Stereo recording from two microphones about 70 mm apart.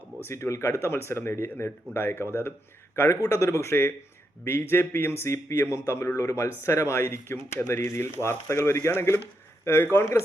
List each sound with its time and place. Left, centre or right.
0.3 s a man's voice: left